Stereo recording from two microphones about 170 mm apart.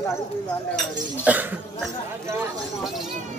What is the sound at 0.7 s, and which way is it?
Speech, 10° right (ahead or behind).